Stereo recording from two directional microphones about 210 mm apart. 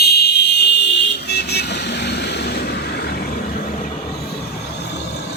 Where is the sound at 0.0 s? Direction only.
50° left (ahead or behind).